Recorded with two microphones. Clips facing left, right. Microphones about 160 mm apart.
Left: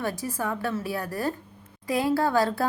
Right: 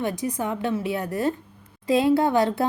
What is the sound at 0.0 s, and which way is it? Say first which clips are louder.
A woman's voice: right 3 dB; 20° right (ahead or behind).